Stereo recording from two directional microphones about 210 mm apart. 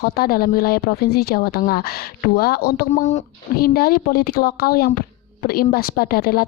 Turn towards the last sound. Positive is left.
turn(degrees=45)  # may be behind; listen again after turning